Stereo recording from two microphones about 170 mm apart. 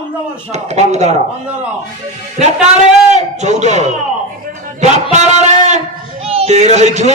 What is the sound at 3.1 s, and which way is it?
A man's voice, 45° right (ahead or behind).